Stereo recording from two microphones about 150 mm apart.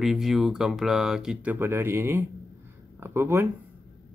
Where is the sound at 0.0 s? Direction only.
5° right (ahead or behind).